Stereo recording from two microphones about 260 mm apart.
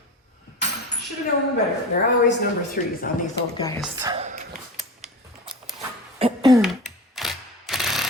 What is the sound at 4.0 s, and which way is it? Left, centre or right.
Speech, centre.